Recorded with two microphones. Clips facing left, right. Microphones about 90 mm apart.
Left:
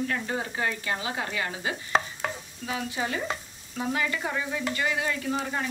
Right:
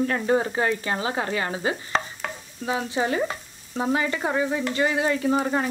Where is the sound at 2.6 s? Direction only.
30° right (ahead or behind).